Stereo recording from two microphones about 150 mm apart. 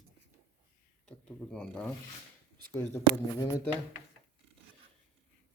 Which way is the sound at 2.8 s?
20° left (ahead or behind).